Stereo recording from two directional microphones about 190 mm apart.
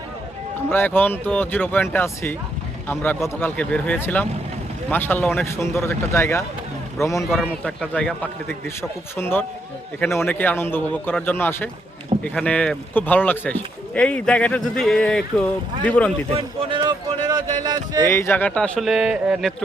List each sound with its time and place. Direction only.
0.7 s speech: 10° left (ahead or behind)
7.3 s speech: 5° left (ahead or behind)
16.3 s speech: 30° right (ahead or behind)
18.0 s speech: 15° left (ahead or behind)